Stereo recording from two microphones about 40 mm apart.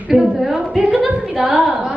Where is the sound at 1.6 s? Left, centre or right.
Right.